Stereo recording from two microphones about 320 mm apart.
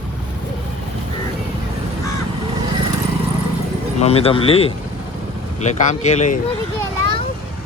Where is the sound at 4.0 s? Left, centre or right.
Centre.